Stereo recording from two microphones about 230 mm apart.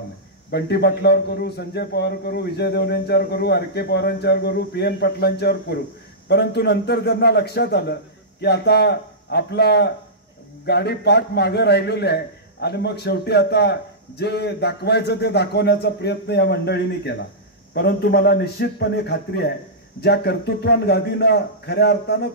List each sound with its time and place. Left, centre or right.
0.5 s a man's voice: left